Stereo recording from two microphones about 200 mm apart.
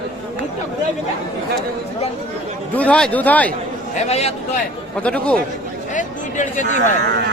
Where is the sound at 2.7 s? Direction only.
5° left (ahead or behind).